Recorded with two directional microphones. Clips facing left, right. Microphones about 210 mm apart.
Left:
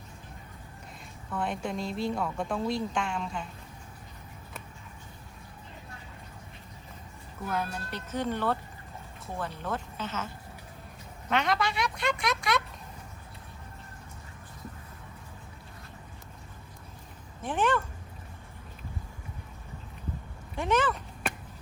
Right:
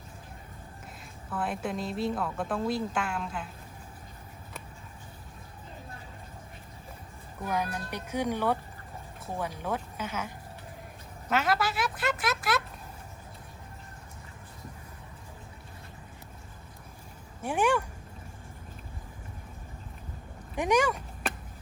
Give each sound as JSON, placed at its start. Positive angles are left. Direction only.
{"t": 1.3, "sound": "a woman's voice", "side_deg": -5}
{"t": 7.4, "sound": "a woman's voice", "side_deg": -15}
{"t": 17.4, "sound": "speech", "side_deg": -10}
{"t": 20.6, "sound": "a sound", "side_deg": -15}